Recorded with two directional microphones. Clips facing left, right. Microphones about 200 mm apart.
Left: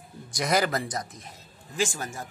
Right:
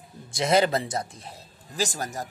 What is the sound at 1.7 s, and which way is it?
Speech, 40° right (ahead or behind).